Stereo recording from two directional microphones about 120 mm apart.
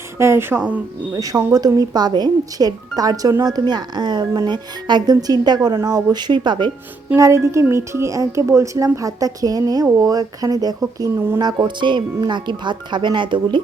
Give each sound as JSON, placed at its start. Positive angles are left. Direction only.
{"t": 0.2, "sound": "speech", "side_deg": -20}
{"t": 1.1, "sound": "speech", "side_deg": -30}
{"t": 7.2, "sound": "speech", "side_deg": -25}